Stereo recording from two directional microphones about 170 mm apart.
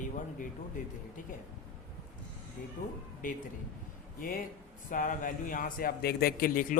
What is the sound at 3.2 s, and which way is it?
A man's voice, 50° left (ahead or behind).